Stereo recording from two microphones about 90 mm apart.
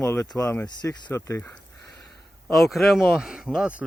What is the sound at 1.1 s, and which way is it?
Speech, 30° left (ahead or behind).